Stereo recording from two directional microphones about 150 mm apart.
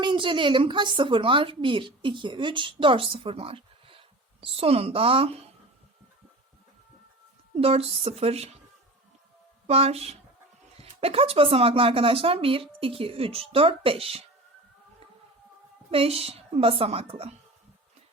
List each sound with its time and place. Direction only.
0.0 s a woman's voice: 35° right (ahead or behind)
7.5 s speech: 40° right (ahead or behind)
9.6 s a woman's voice: 45° right (ahead or behind)
15.9 s a woman's voice: 40° right (ahead or behind)